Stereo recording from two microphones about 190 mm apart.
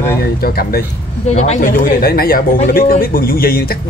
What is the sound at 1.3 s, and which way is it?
Speech, 35° left (ahead or behind).